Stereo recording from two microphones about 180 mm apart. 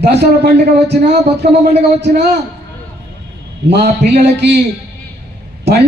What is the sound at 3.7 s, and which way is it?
Speech, 65° right (ahead or behind).